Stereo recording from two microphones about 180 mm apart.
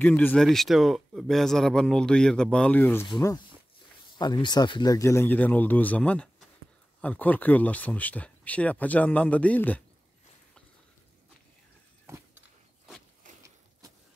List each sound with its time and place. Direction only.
0.0 s speech: 10° left (ahead or behind)
3.1 s speech: 20° left (ahead or behind)